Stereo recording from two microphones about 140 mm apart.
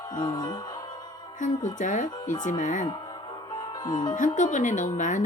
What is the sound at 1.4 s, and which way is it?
Speech, 65° left (ahead or behind).